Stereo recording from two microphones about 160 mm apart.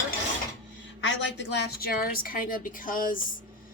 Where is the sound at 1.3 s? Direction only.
90° left.